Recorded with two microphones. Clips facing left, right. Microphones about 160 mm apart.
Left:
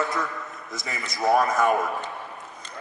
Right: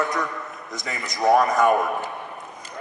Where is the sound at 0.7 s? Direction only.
Centre (ahead or behind).